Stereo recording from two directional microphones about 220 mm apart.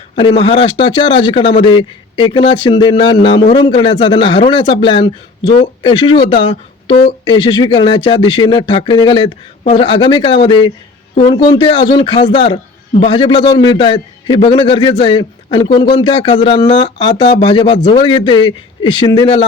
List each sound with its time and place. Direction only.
0.2 s speech: 25° left (ahead or behind)